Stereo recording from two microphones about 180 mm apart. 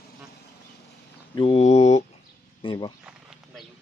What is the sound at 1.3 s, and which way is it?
Mantra, 30° left (ahead or behind).